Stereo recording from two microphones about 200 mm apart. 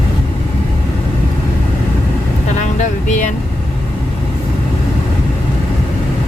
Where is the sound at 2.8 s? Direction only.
40° left (ahead or behind).